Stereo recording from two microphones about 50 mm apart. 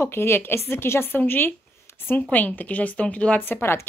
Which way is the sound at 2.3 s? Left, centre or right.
Left.